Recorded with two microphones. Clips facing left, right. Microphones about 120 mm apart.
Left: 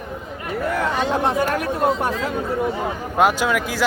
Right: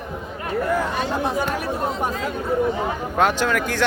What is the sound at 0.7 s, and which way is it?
Speech, 70° left (ahead or behind).